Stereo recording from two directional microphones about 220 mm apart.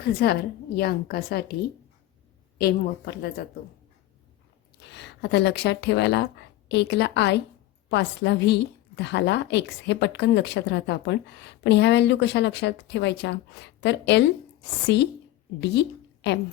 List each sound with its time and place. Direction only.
0.0 s a woman's voice: 45° left (ahead or behind)
2.6 s a woman's voice: 45° left (ahead or behind)
4.9 s a woman's voice: 50° left (ahead or behind)